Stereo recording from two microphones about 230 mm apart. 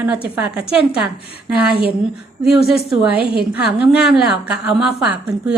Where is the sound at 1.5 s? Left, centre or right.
Centre.